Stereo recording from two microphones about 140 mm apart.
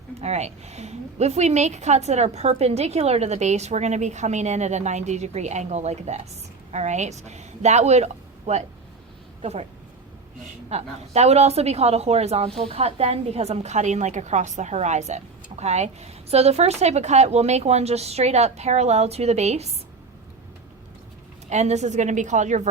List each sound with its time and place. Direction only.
0.2 s a woman's voice: 50° right (ahead or behind)
10.7 s a woman's voice: 50° right (ahead or behind)
21.5 s a woman's voice: 55° right (ahead or behind)